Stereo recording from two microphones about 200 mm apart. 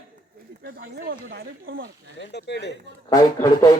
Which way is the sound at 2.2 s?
60° left (ahead or behind).